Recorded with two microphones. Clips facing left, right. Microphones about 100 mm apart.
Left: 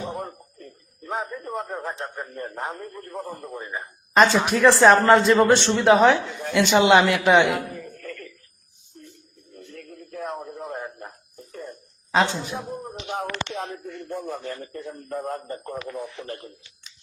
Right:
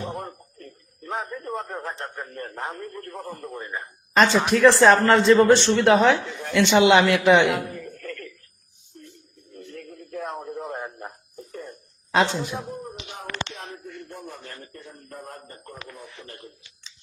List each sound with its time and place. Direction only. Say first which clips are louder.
0.1 s music: left 1 dB; centre (ahead or behind)
1.0 s a man's voice: left 1 dB; 10° left (ahead or behind)
7.7 s chuckle: right 1 dB; 5° left (ahead or behind)
9.6 s a sound: right 2 dB; centre (ahead or behind)
10.8 s radio: even; 10° right (ahead or behind)
12.1 s a man's voice: even; centre (ahead or behind)
13.1 s a sound: left 7 dB; 65° left (ahead or behind)